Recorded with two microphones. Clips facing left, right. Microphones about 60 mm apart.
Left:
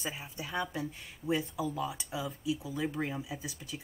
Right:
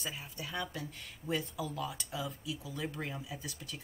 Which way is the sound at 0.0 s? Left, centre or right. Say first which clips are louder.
Left 3 dB; centre.